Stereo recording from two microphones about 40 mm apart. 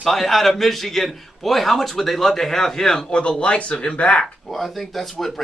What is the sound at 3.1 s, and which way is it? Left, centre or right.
Speech, left.